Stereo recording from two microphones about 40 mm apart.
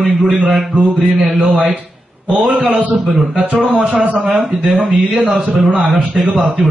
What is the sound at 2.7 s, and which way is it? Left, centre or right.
Speech, right.